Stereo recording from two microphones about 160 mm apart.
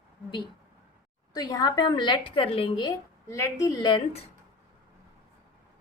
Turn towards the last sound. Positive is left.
turn(degrees=20)  # may be behind; listen again after turning